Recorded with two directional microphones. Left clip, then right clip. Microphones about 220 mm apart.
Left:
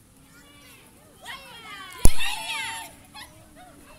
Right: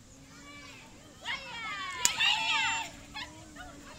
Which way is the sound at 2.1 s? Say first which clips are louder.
Right 5 dB; 50° left (ahead or behind).